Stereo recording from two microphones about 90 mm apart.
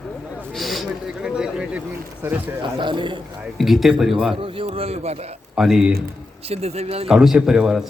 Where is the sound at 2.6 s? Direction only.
60° right (ahead or behind).